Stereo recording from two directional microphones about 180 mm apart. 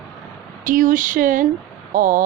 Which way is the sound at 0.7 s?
45° right (ahead or behind).